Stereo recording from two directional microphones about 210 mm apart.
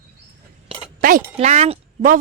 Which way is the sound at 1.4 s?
30° right (ahead or behind).